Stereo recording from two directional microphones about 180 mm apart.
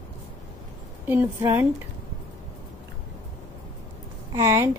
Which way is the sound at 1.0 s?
10° right (ahead or behind).